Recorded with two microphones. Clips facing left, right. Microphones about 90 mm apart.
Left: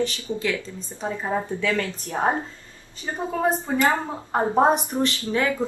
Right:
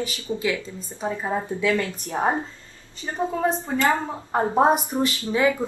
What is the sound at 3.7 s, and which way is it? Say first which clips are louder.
Speech: even; 15° left (ahead or behind).